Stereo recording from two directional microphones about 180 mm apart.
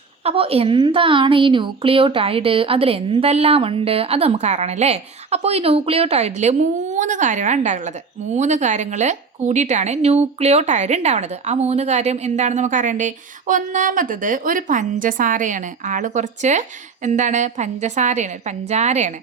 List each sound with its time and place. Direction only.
0.3 s a woman's voice: 30° right (ahead or behind)